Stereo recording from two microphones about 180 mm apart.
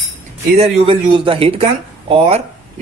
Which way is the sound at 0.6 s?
30° right (ahead or behind).